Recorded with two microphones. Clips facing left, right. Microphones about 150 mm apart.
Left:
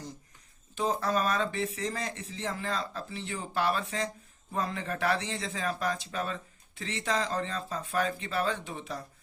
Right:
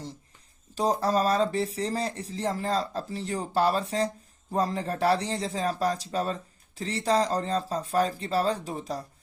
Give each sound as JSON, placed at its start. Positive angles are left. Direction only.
{"t": 0.8, "sound": "speech", "side_deg": -35}